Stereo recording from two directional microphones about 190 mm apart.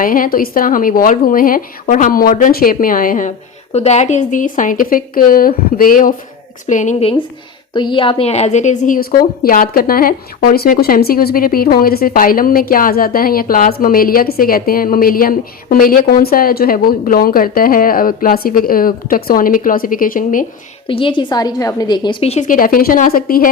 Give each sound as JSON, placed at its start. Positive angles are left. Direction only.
{"t": 0.0, "sound": "a woman's voice", "side_deg": 45}
{"t": 7.7, "sound": "a woman's voice", "side_deg": 25}
{"t": 20.8, "sound": "a woman's voice", "side_deg": 25}